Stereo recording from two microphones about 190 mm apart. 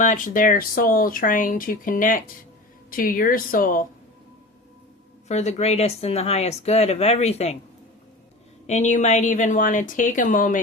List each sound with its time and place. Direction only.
0.0 s speech: 45° left (ahead or behind)
5.3 s speech: 35° left (ahead or behind)
8.6 s speech: 35° left (ahead or behind)